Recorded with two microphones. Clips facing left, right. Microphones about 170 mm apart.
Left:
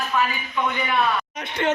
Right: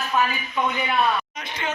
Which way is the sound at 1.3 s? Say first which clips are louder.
Left 6 dB; 65° left (ahead or behind).